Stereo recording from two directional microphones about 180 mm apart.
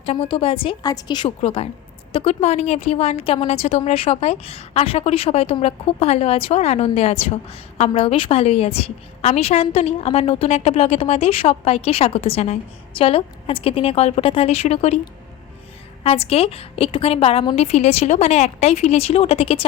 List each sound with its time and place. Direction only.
0.0 s a woman's voice: 30° left (ahead or behind)
16.0 s a woman's voice: 35° left (ahead or behind)